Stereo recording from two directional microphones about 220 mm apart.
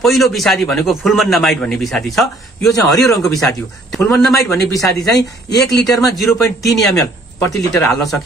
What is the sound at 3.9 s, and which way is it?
Speech, centre (ahead or behind).